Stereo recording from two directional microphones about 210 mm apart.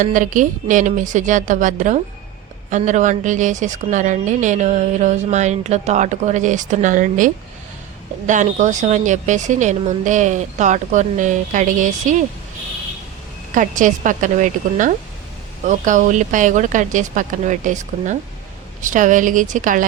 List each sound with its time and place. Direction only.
0.0 s a woman's voice: 40° right (ahead or behind)
8.3 s a woman's voice: 35° right (ahead or behind)
13.5 s a woman's voice: 40° right (ahead or behind)